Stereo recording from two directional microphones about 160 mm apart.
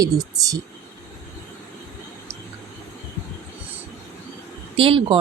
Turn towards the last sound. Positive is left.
turn(degrees=-35)  # may be behind; listen again after turning